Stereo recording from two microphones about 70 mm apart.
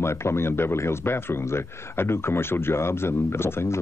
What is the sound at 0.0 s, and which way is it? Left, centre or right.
A man's voice, left.